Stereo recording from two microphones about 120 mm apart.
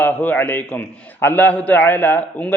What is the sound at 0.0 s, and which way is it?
A man's voice, 15° left (ahead or behind).